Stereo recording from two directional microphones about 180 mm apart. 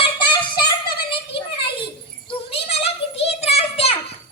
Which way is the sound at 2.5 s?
35° left (ahead or behind).